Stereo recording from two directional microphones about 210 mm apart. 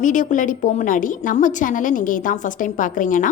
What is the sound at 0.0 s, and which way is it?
A woman's voice, 35° left (ahead or behind).